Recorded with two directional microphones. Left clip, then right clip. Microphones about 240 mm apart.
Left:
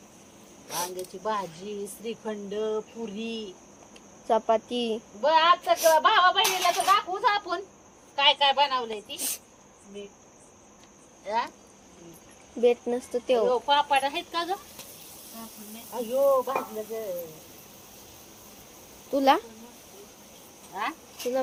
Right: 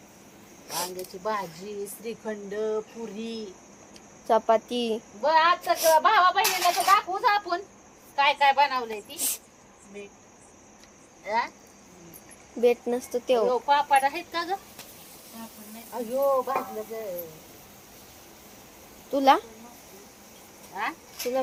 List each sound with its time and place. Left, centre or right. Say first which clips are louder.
0.7 s speech: even; centre
11.3 s speech: right 1 dB; centre
12.6 s speech: even; centre
15.3 s hiss: even; centre
15.9 s speech: left 2 dB; centre
19.1 s speech: right 2 dB; centre
20.7 s speech: even; centre